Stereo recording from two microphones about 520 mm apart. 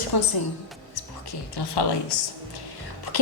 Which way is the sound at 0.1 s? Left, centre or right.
Left.